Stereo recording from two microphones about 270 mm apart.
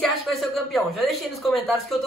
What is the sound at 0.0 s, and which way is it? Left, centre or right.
Speech, centre.